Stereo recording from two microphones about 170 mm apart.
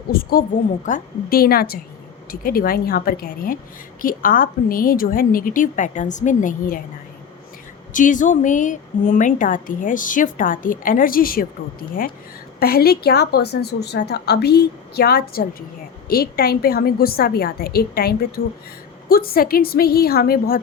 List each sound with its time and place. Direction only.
0.1 s a woman's voice: 60° left (ahead or behind)
7.9 s a woman's voice: 50° left (ahead or behind)